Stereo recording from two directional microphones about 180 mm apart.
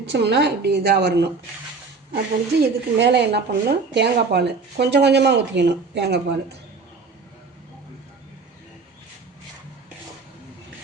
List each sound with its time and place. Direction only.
0.1 s speech: 70° right (ahead or behind)